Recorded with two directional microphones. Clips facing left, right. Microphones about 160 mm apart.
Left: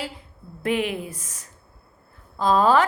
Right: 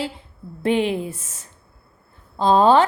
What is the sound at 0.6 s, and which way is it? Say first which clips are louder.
A woman's voice: right 4 dB; 30° right (ahead or behind).